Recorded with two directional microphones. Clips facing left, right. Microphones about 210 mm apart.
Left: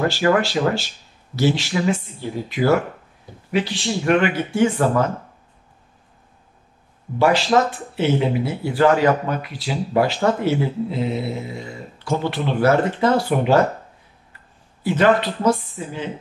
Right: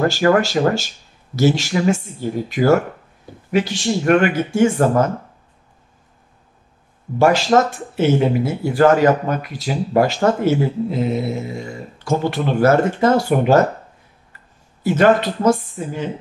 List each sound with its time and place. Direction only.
0.1 s speech: 45° right (ahead or behind)
7.2 s speech: 45° right (ahead or behind)
14.8 s speech: 45° right (ahead or behind)